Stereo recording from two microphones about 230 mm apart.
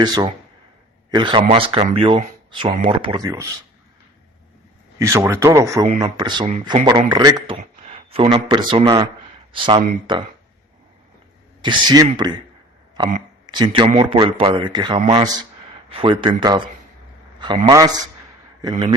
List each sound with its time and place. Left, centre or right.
0.0 s speech: centre
4.9 s speech: centre
7.5 s speech: right
11.6 s speech: centre
17.7 s speech: centre